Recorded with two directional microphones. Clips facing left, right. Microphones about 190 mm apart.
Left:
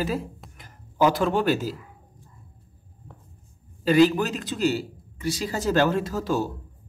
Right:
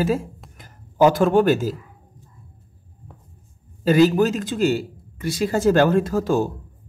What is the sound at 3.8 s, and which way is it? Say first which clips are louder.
Speech: right 3 dB; 45° right (ahead or behind).